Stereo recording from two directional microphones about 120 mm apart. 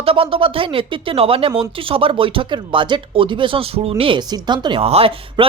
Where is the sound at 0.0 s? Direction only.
50° right (ahead or behind).